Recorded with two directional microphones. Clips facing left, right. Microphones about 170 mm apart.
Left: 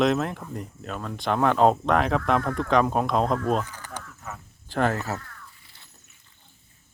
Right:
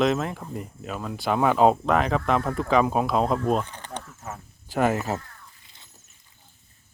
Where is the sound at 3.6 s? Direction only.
30° right (ahead or behind).